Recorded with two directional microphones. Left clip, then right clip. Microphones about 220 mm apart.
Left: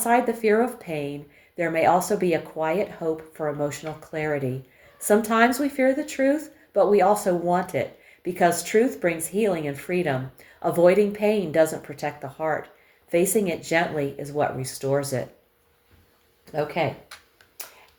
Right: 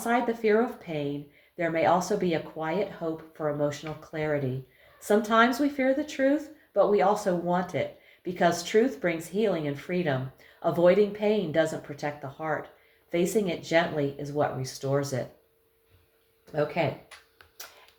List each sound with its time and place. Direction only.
0.0 s speech: 35° left (ahead or behind)
16.5 s speech: 35° left (ahead or behind)